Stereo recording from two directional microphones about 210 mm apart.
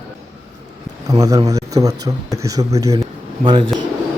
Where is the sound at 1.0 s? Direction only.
15° right (ahead or behind).